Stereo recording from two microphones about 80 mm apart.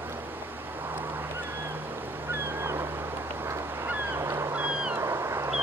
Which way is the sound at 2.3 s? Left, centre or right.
Right.